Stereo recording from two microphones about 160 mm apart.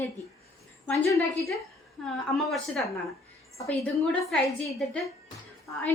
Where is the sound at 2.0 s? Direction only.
Centre (ahead or behind).